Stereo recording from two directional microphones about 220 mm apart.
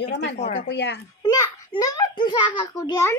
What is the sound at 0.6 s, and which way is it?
Speech, 50° left (ahead or behind).